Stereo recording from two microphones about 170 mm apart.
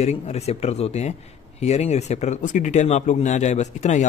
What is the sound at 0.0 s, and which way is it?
Speech, 40° left (ahead or behind).